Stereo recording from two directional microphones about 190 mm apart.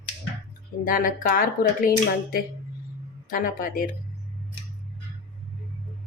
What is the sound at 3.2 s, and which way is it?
Speech, 45° left (ahead or behind).